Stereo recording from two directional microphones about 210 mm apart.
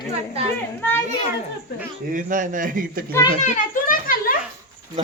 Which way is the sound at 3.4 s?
40° left (ahead or behind).